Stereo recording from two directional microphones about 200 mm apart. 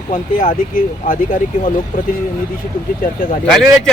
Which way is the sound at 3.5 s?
5° left (ahead or behind).